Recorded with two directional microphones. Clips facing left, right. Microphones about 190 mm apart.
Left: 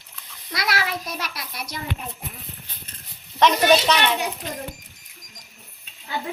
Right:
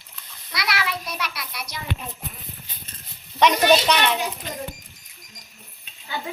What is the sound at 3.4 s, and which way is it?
Speech, 5° right (ahead or behind).